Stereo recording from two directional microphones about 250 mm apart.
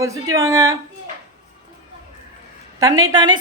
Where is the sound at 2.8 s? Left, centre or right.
Centre.